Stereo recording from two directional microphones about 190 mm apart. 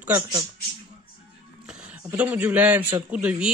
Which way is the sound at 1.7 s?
5° right (ahead or behind).